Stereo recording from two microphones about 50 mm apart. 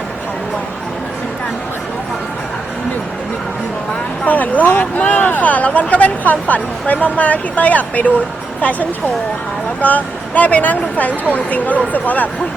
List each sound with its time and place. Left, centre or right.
4.3 s speech: left
9.8 s speech: left